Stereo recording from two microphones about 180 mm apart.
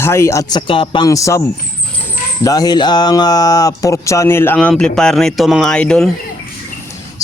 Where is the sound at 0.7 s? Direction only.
25° left (ahead or behind).